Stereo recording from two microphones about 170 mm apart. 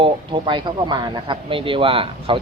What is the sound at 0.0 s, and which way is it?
Speech, 30° right (ahead or behind).